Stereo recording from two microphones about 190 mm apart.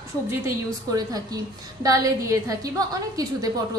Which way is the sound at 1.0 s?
20° right (ahead or behind).